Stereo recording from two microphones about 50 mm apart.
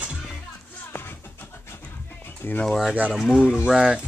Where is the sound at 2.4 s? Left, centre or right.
Left.